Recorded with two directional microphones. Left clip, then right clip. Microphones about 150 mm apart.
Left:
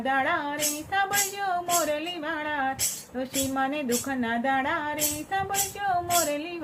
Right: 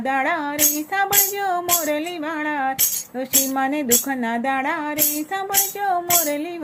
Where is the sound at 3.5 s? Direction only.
50° right (ahead or behind).